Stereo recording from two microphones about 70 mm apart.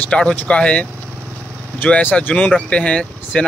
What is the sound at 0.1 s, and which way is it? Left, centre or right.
Speech, centre.